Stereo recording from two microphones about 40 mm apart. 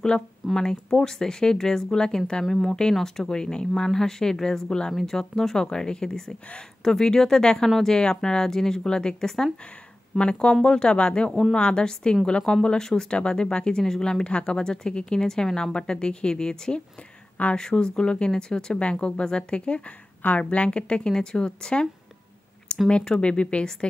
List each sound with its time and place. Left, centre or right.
0.6 s a woman's voice: centre
14.2 s a woman's voice: left
22.7 s a sound: left
23.2 s a woman's voice: left